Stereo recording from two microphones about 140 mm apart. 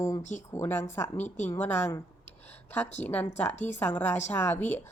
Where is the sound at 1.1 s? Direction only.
55° left (ahead or behind).